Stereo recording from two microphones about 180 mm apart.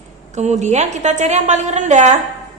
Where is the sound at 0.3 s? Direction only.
40° right (ahead or behind).